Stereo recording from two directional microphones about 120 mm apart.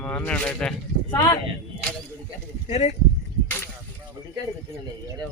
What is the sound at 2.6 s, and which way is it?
Speech, 70° left (ahead or behind).